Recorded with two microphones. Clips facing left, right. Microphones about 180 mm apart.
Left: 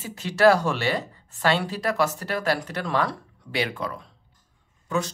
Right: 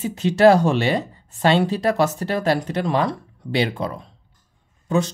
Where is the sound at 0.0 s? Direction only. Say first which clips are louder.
Right 4 dB; 20° right (ahead or behind).